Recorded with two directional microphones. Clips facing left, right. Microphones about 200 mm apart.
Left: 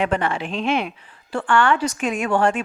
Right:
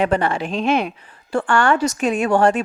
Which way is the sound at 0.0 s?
40° right (ahead or behind).